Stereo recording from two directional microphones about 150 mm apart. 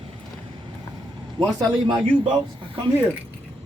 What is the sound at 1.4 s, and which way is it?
Speech, 35° right (ahead or behind).